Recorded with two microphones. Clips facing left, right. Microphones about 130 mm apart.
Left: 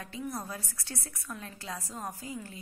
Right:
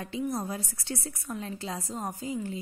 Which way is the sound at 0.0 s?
25° right (ahead or behind).